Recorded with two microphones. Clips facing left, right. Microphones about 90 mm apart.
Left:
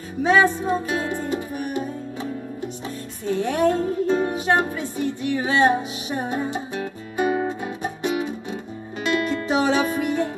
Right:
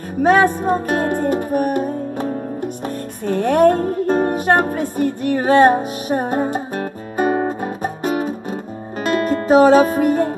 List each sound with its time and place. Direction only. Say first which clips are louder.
0.2 s music: right 4 dB; 50° right (ahead or behind)